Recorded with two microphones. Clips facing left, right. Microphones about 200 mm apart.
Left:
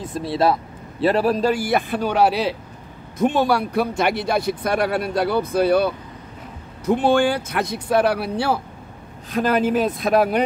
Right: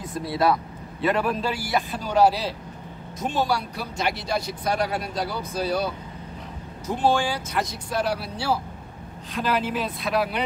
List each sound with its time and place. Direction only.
0.0 s speech: 25° left (ahead or behind); by 5.9 s 60° left (ahead or behind)
6.9 s speech: 60° left (ahead or behind)
9.3 s speech: 45° left (ahead or behind)